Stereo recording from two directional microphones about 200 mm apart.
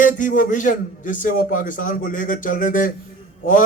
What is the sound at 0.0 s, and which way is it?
A man's voice, 40° left (ahead or behind).